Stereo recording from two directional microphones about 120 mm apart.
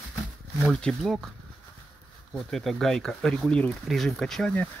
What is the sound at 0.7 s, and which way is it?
Speech, 5° left (ahead or behind).